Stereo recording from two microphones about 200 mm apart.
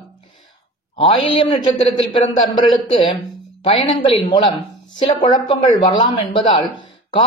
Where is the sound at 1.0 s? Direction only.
25° left (ahead or behind).